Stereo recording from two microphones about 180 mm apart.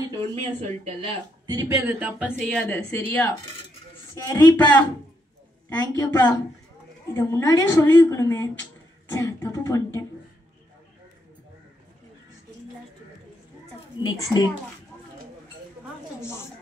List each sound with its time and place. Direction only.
0.4 s speech: 35° right (ahead or behind)
1.5 s speech: 20° right (ahead or behind)
1.9 s a woman's voice: 10° right (ahead or behind); by 9.8 s 15° left (ahead or behind)
14.0 s a woman's voice: 20° left (ahead or behind)
16.2 s a woman's voice: 15° left (ahead or behind)